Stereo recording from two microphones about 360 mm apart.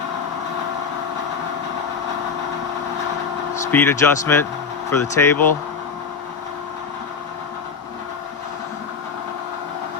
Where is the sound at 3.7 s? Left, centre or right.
Centre.